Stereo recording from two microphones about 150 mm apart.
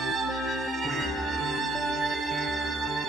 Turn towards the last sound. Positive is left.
turn(degrees=0)  # may be behind; listen again after turning